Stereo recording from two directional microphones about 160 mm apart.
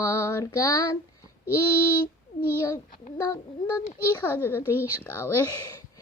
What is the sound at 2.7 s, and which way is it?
A child's voice, 20° left (ahead or behind).